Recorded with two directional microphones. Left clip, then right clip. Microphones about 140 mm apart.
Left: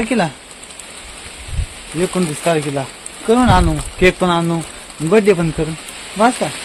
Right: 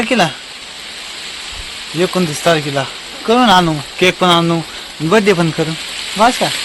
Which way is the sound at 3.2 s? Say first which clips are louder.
Right 3 dB; centre (ahead or behind).